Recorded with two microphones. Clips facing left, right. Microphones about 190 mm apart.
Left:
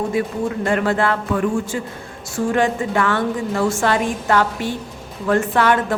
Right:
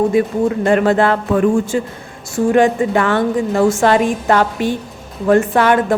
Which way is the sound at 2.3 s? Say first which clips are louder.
Right 6 dB; 15° right (ahead or behind).